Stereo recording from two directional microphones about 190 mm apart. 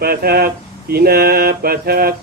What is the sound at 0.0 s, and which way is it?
Speech, 55° right (ahead or behind).